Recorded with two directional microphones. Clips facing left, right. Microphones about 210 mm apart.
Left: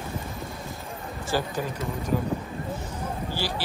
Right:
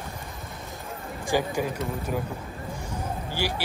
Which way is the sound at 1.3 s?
15° right (ahead or behind).